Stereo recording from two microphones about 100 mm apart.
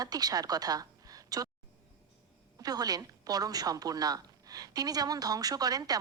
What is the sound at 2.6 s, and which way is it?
A woman's voice, 40° right (ahead or behind).